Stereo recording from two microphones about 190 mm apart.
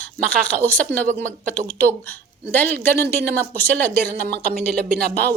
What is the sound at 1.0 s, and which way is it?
Speech, 45° right (ahead or behind).